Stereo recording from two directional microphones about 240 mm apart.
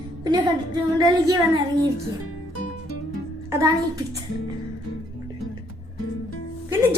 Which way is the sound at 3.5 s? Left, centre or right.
Centre.